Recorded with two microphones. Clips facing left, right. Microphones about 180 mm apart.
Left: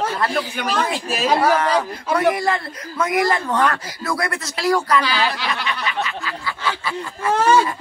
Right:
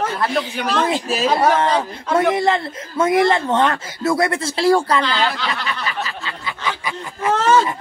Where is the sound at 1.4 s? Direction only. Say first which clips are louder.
Right 1 dB; 25° right (ahead or behind).